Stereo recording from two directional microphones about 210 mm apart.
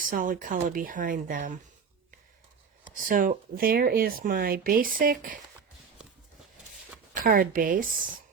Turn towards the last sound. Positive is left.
turn(degrees=-40)  # may be behind; listen again after turning